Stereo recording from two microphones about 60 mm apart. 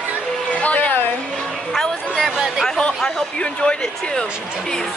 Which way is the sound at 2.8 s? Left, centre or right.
Centre.